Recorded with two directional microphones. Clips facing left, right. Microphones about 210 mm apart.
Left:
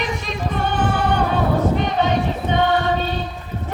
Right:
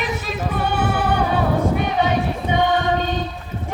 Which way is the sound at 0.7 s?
10° right (ahead or behind).